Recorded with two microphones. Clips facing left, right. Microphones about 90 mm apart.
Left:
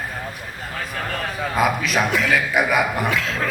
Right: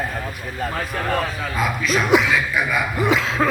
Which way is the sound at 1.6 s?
60° left (ahead or behind).